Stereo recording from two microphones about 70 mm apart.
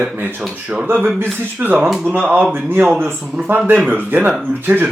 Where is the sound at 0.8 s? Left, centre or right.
Right.